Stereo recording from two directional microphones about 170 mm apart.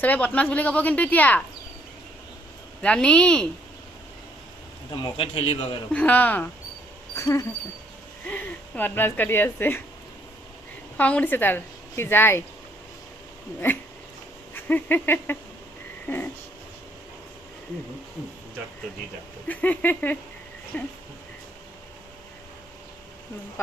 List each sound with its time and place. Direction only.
0.0 s a woman's voice: 10° left (ahead or behind)
2.8 s speech: 5° left (ahead or behind)
4.9 s a man's voice: 30° left (ahead or behind)
5.9 s a woman's voice: 10° left (ahead or behind)
10.9 s a woman's voice: 10° left (ahead or behind)
14.5 s a sound: 10° left (ahead or behind)
16.0 s frog: 10° left (ahead or behind)
19.5 s a woman's voice: 10° left (ahead or behind)